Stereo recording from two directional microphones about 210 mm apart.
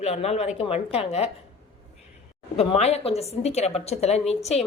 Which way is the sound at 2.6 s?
30° left (ahead or behind).